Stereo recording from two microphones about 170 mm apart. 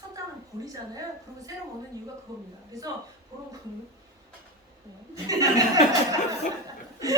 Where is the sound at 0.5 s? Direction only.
15° right (ahead or behind).